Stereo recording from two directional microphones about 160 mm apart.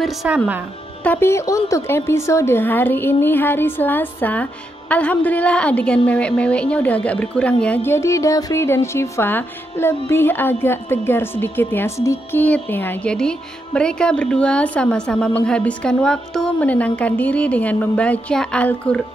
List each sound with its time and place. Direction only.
0.0 s speech: centre (ahead or behind)
1.0 s a woman's voice: 15° left (ahead or behind)